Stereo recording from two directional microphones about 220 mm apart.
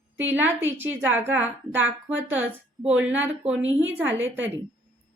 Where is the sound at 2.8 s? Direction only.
5° right (ahead or behind).